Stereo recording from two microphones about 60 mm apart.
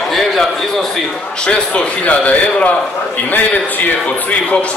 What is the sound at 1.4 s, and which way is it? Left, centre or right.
A man's voice, centre.